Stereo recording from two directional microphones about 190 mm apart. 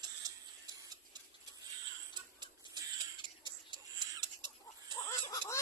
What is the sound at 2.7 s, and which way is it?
Crow, 20° right (ahead or behind).